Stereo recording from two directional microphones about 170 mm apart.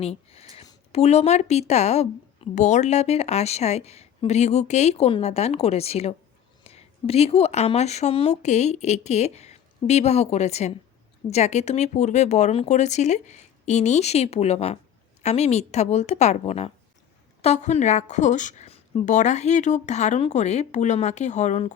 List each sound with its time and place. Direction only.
0.0 s a woman's voice: 35° left (ahead or behind)